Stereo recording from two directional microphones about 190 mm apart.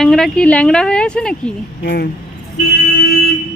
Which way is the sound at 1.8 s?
60° left (ahead or behind).